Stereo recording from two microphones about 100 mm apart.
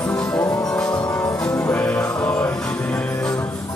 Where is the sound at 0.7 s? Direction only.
10° left (ahead or behind).